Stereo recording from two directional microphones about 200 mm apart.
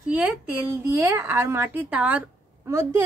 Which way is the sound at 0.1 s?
10° right (ahead or behind).